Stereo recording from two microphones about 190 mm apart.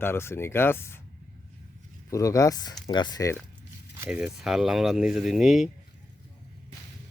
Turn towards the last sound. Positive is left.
turn(degrees=0)  # may be behind; listen again after turning